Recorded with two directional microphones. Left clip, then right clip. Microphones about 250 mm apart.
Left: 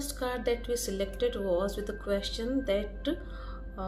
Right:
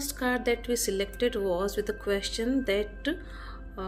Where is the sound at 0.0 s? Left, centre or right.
Right.